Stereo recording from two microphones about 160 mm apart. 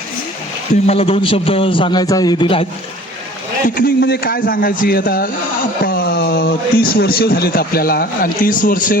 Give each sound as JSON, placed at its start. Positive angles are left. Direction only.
{"t": 0.9, "sound": "a man's voice", "side_deg": 35}
{"t": 3.8, "sound": "speech", "side_deg": 65}
{"t": 5.8, "sound": "speech", "side_deg": 70}